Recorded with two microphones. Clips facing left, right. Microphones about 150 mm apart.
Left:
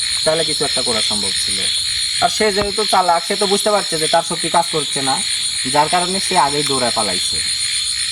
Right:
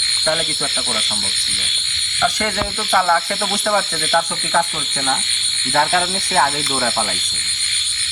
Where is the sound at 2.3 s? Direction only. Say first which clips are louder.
Left 8 dB; 35° left (ahead or behind).